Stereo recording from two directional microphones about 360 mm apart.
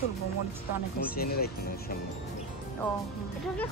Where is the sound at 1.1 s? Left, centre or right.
Left.